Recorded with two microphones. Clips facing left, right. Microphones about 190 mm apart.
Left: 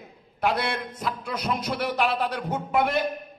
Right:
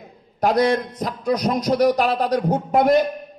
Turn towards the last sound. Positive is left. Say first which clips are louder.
# right 8 dB
turn(degrees=-40)  # may be behind; listen again after turning